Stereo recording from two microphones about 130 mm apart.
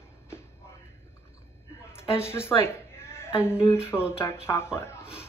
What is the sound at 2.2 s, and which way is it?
Speech, 20° left (ahead or behind).